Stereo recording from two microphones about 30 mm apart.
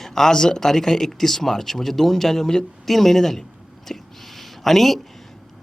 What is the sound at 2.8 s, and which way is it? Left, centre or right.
Speech, centre.